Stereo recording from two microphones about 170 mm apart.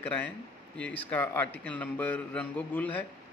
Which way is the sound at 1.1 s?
10° left (ahead or behind).